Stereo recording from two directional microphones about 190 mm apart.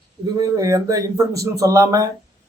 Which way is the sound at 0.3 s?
20° right (ahead or behind).